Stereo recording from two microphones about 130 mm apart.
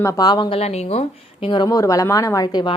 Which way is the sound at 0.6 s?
55° left (ahead or behind).